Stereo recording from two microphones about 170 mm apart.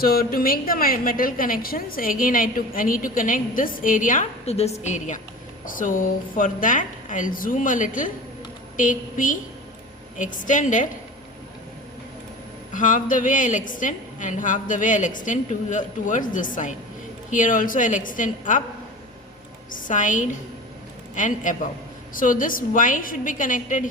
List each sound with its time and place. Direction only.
0.0 s a woman's voice: 60° left (ahead or behind)
12.7 s a woman's voice: 50° left (ahead or behind)
19.7 s a woman's voice: 50° left (ahead or behind)